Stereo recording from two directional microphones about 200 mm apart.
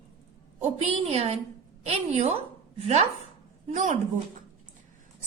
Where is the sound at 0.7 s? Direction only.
30° right (ahead or behind).